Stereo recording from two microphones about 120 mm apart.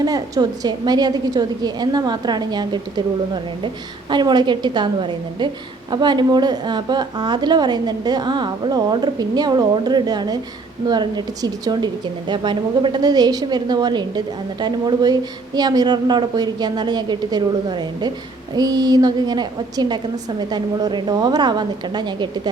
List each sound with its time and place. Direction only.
0.0 s a woman's voice: 30° right (ahead or behind)
4.1 s a woman's voice: 40° right (ahead or behind)